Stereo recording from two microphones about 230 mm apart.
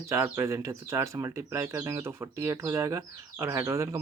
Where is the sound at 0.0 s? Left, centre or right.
Centre.